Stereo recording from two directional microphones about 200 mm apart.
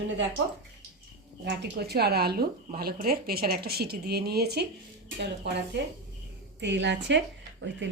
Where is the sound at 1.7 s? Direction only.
55° right (ahead or behind).